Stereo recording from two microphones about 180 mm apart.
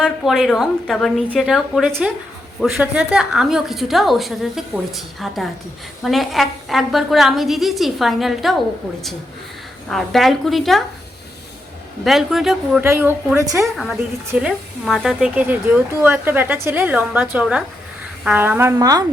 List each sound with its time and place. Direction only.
0.0 s a woman's voice: centre (ahead or behind)
9.9 s a woman's voice: centre (ahead or behind)
12.0 s a woman's voice: centre (ahead or behind)
12.8 s a woman's voice: 15° right (ahead or behind)
13.7 s a woman's voice: centre (ahead or behind); by 19.0 s 20° right (ahead or behind)